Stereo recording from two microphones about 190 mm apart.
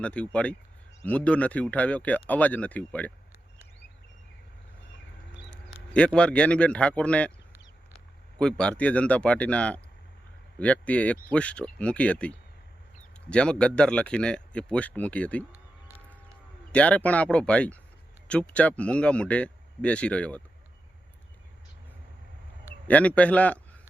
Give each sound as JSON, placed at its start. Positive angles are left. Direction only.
{"t": 0.0, "sound": "speech", "side_deg": 5}
{"t": 5.9, "sound": "speech", "side_deg": 5}
{"t": 8.4, "sound": "speech", "side_deg": 5}
{"t": 13.3, "sound": "speech", "side_deg": 5}
{"t": 16.7, "sound": "speech", "side_deg": 5}
{"t": 22.9, "sound": "speech", "side_deg": 5}